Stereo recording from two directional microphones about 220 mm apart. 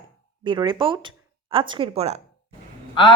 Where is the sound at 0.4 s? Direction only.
20° right (ahead or behind).